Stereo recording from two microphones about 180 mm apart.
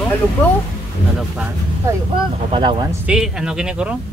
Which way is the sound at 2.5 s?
25° right (ahead or behind).